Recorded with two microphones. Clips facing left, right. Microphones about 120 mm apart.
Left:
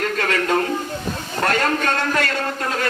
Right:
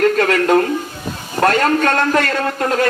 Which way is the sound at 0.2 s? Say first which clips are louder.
Right 7 dB; 50° right (ahead or behind).